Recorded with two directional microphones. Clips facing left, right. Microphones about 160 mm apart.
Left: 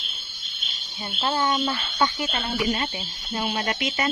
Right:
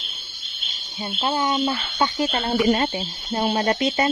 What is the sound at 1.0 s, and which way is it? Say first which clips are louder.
Speech: right 2 dB; 15° right (ahead or behind).